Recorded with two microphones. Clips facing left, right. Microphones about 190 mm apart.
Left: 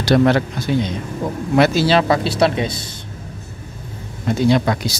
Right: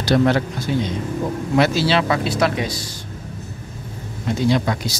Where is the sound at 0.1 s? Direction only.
65° left (ahead or behind).